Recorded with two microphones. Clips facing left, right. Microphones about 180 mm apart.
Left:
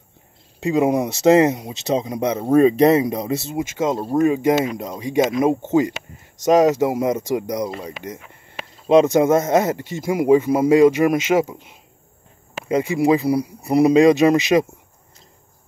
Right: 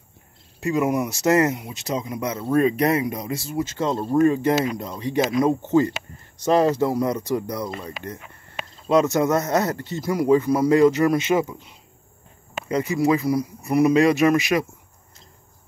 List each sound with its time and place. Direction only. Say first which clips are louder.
0.6 s speech: left 4 dB; 20° left (ahead or behind)
3.7 s speech: left 1 dB; 10° left (ahead or behind); by 13.9 s 30° left (ahead or behind)
13.9 s speech: left 4 dB; 20° left (ahead or behind)